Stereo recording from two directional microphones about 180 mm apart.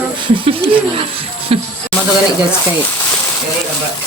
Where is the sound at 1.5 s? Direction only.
30° right (ahead or behind).